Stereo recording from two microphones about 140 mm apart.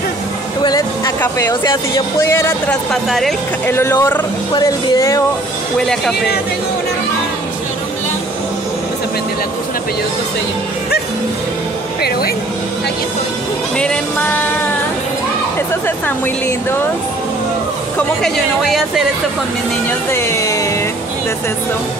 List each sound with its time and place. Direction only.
0.6 s music: 30° left (ahead or behind)
1.5 s speech: 30° left (ahead or behind)
2.7 s speech: 5° left (ahead or behind)
3.7 s speech: 20° left (ahead or behind)
5.8 s speech: 5° left (ahead or behind)
13.7 s music: 10° left (ahead or behind)
17.9 s speech: 5° left (ahead or behind)
20.1 s speech: 20° left (ahead or behind)